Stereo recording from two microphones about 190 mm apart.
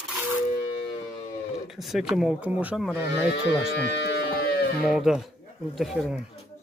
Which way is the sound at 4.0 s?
60° left (ahead or behind).